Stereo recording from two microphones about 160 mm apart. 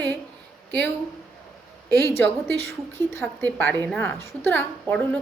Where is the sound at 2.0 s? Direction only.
15° left (ahead or behind).